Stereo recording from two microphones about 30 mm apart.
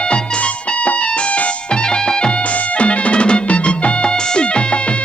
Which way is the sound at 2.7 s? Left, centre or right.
Left.